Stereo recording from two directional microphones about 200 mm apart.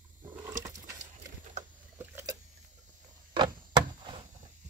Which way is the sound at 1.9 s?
10° right (ahead or behind).